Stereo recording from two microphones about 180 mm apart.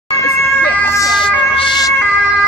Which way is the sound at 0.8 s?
20° left (ahead or behind).